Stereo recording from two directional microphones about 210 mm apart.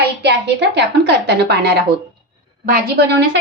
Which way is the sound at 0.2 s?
55° right (ahead or behind).